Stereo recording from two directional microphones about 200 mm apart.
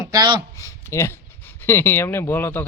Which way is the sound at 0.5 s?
15° left (ahead or behind).